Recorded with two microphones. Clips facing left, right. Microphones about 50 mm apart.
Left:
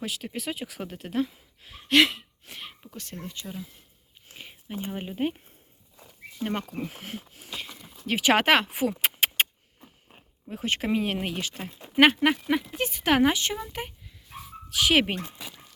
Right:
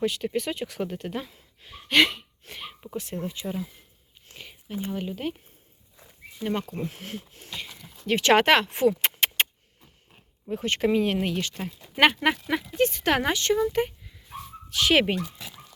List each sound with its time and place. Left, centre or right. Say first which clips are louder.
0.0 s speech: right 7 dB; centre
2.8 s speech: right 12 dB; centre
4.3 s speech: right 1 dB; centre
6.4 s speech: right 2 dB; centre
6.7 s speech: right 1 dB; centre
7.0 s a sound: right 1 dB; centre
10.5 s speech: right 3 dB; centre
14.7 s speech: right 1 dB; centre
15.4 s dog: even; centre